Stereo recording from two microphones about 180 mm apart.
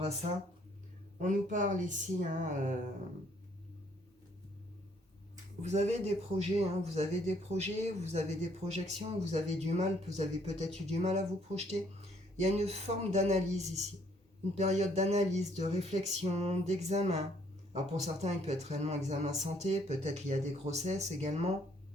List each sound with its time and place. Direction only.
0.0 s speech: 40° right (ahead or behind)
5.6 s speech: 40° right (ahead or behind)